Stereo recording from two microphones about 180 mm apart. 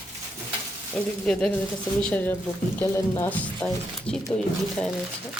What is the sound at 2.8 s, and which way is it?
Speech, 15° left (ahead or behind).